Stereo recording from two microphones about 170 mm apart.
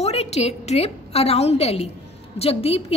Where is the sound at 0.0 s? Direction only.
40° left (ahead or behind).